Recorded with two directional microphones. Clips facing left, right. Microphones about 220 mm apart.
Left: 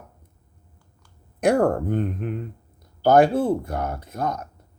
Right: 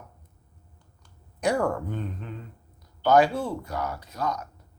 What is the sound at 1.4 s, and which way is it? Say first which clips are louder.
Speech: left 6 dB; 55° left (ahead or behind).